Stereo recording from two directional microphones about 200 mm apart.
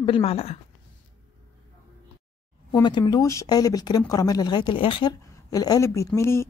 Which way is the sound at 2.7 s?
20° left (ahead or behind).